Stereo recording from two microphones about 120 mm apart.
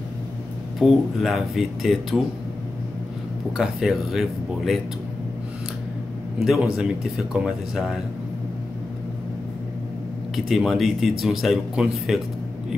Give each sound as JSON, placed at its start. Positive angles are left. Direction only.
{"t": 0.7, "sound": "speech", "side_deg": 0}
{"t": 3.5, "sound": "speech", "side_deg": 0}
{"t": 6.4, "sound": "speech", "side_deg": -5}
{"t": 10.3, "sound": "speech", "side_deg": 0}